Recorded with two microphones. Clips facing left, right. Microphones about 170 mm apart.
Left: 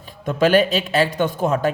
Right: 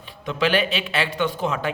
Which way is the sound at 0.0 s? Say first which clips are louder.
Left 5 dB; 45° left (ahead or behind).